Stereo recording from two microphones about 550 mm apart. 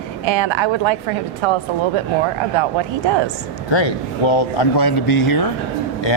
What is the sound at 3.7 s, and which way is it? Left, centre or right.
Speech, left.